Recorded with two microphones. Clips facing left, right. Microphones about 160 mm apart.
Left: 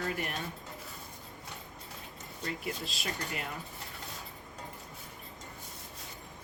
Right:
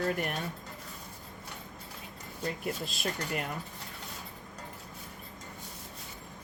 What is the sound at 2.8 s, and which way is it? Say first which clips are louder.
Speech: right 5 dB; 50° right (ahead or behind).